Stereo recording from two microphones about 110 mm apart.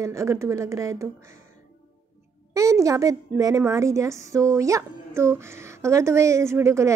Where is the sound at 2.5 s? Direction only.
30° right (ahead or behind).